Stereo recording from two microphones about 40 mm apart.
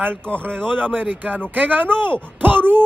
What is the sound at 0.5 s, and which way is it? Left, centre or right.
Speech, centre.